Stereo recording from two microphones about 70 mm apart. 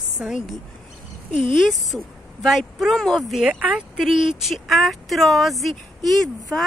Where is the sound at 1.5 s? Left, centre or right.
Centre.